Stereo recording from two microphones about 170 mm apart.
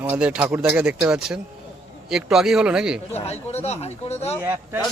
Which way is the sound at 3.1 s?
40° left (ahead or behind).